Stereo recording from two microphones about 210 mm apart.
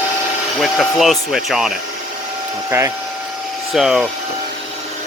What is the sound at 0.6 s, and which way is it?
Speech, centre (ahead or behind).